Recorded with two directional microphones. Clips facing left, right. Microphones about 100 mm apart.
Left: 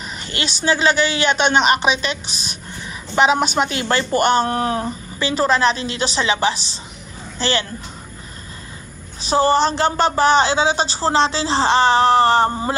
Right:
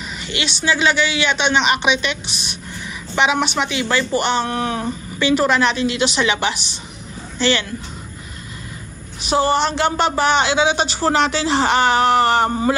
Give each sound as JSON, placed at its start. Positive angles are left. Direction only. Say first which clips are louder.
{"t": 0.2, "sound": "a woman's voice", "louder": "even", "side_deg": 40}
{"t": 9.2, "sound": "a woman's voice", "louder": "left 1 dB", "side_deg": 35}